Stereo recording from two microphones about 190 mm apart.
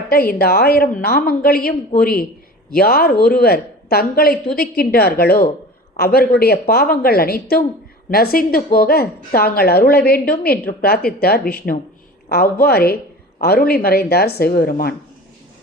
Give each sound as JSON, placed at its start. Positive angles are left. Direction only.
{"t": 0.1, "sound": "a woman's voice", "side_deg": 50}